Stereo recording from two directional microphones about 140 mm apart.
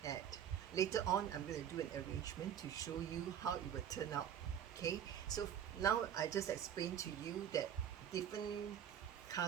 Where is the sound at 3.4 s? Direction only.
25° left (ahead or behind).